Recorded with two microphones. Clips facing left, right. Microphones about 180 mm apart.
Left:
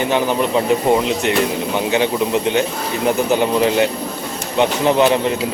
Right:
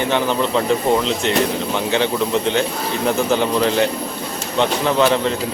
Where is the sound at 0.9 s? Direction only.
15° left (ahead or behind).